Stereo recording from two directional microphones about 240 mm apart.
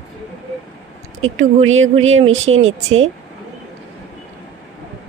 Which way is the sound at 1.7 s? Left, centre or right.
Right.